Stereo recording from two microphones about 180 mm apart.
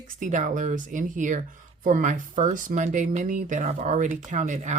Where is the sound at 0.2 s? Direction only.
45° right (ahead or behind).